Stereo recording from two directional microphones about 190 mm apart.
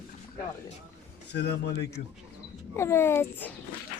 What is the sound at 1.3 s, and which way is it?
Speech, 60° left (ahead or behind).